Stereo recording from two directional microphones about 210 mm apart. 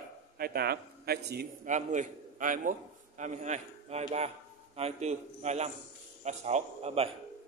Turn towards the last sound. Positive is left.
turn(degrees=-30)  # may be behind; listen again after turning